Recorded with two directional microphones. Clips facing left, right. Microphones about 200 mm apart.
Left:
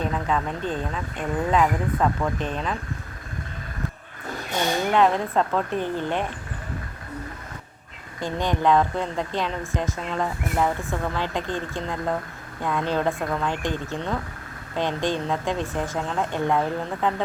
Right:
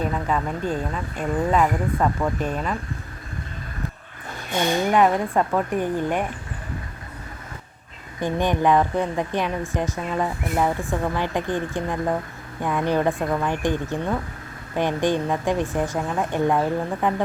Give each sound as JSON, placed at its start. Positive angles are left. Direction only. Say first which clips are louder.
{"t": 0.0, "sound": "speech", "louder": "right 1 dB", "side_deg": -5}
{"t": 4.9, "sound": "speech", "louder": "even", "side_deg": -10}
{"t": 8.2, "sound": "speech", "louder": "right 3 dB", "side_deg": -15}